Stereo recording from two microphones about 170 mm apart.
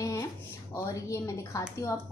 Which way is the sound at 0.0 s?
15° left (ahead or behind).